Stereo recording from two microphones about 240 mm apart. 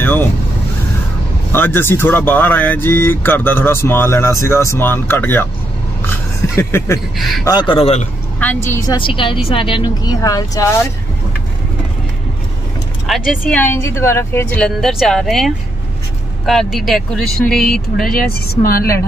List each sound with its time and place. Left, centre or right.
0.0 s vehicle: centre
1.5 s speech: centre
7.4 s a man's voice: centre
8.4 s speech: centre
13.0 s a woman's voice: centre
18.5 s a woman's voice: left